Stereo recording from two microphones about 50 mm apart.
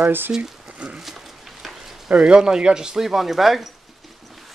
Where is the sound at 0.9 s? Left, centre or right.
Centre.